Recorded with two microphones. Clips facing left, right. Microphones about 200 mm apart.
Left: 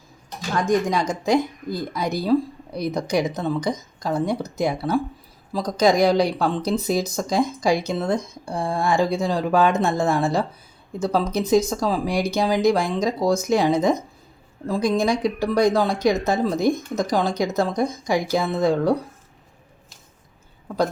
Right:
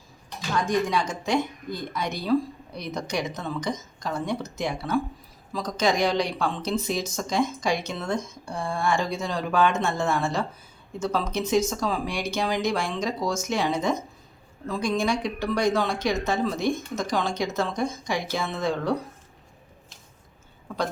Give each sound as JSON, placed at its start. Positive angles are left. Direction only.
{"t": 0.6, "sound": "speech", "side_deg": 45}